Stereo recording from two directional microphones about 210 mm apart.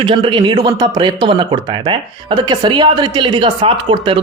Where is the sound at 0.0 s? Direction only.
25° right (ahead or behind).